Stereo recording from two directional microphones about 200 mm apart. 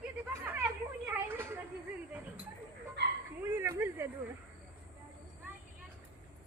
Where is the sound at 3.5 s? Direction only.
10° right (ahead or behind).